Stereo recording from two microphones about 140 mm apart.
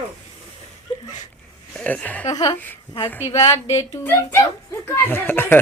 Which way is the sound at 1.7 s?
10° left (ahead or behind).